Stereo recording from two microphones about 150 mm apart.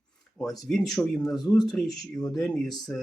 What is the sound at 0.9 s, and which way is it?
Speech, 25° left (ahead or behind).